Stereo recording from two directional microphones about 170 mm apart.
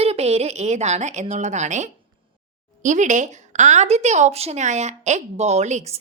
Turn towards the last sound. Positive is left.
turn(degrees=-40)  # may be behind; listen again after turning